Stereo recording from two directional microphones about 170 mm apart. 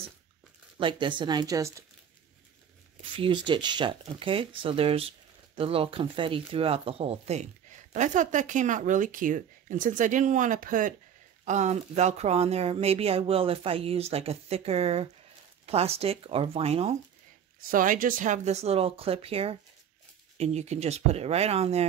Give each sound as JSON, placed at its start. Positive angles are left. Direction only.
{"t": 0.7, "sound": "speech", "side_deg": -30}
{"t": 3.2, "sound": "speech", "side_deg": -30}
{"t": 17.6, "sound": "speech", "side_deg": -55}